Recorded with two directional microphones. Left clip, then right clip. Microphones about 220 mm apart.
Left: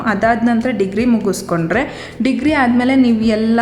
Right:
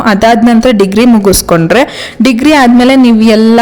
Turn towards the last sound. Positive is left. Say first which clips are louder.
# right 10 dB
turn(degrees=-35)  # may be behind; listen again after turning